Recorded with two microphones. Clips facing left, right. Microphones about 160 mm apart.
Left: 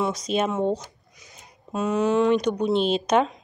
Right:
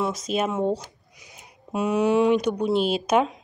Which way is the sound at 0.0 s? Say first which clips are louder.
Left 1 dB; centre (ahead or behind).